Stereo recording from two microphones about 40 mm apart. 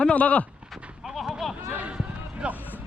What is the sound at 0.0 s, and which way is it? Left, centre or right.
Speech, left.